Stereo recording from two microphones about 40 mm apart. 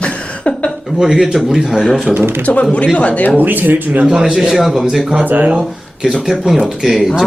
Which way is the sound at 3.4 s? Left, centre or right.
Right.